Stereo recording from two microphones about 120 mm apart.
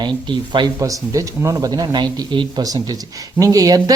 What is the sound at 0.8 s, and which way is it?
Speech, 30° right (ahead or behind).